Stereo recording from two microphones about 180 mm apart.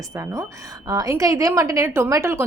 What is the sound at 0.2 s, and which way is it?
A woman's voice, 15° right (ahead or behind).